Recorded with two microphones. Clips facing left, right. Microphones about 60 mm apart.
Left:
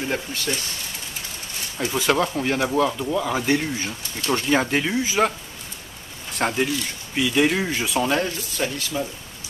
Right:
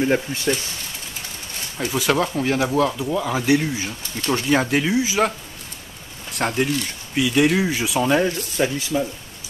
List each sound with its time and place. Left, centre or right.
0.0 s speech: right
1.8 s speech: centre
6.3 s speech: centre
8.5 s speech: centre